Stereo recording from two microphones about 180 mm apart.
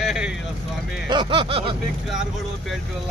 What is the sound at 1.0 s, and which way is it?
Speech, 25° right (ahead or behind).